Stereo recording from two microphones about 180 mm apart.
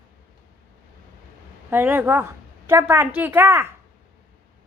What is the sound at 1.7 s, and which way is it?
A woman's voice, 10° right (ahead or behind).